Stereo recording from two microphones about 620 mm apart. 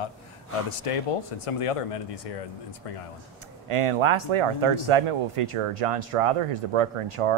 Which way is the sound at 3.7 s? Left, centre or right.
Right.